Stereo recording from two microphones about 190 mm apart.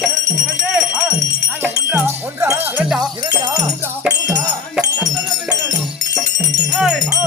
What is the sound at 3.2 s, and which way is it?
Music, 20° right (ahead or behind).